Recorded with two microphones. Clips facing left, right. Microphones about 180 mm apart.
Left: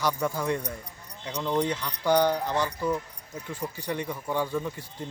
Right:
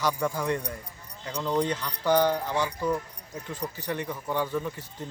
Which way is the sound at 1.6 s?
10° left (ahead or behind).